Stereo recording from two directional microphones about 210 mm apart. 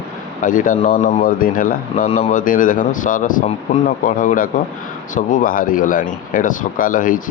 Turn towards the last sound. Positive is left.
turn(degrees=40)  # may be behind; listen again after turning